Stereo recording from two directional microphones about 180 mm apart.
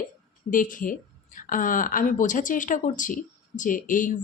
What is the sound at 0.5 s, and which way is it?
A woman's voice, 45° left (ahead or behind).